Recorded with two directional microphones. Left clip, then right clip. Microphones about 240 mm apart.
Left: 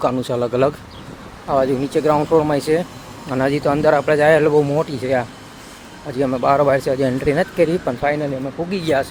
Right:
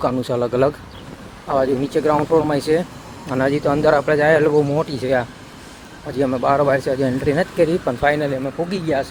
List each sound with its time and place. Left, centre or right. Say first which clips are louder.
0.0 s speech: left 1 dB; centre
8.0 s speech: right 3 dB; centre
8.6 s speech: even; right